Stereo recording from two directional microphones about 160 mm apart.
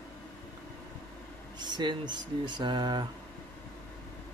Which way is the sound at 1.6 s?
25° right (ahead or behind).